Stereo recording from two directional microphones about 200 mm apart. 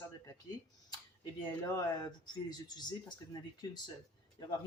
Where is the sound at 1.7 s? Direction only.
20° left (ahead or behind).